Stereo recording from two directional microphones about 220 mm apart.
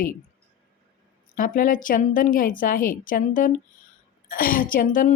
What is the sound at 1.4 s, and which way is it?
A woman's voice, 40° left (ahead or behind).